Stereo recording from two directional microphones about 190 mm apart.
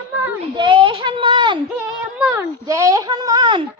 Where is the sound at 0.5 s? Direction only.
25° right (ahead or behind).